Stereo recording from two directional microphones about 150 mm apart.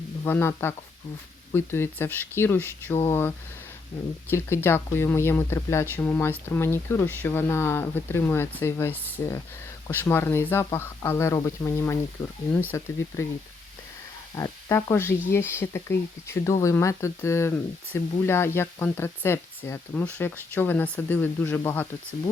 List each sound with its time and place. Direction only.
0.3 s speech: 15° left (ahead or behind)
14.3 s speech: 20° left (ahead or behind)